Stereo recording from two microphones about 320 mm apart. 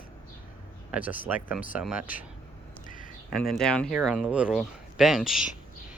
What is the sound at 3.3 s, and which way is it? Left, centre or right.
Speech, centre.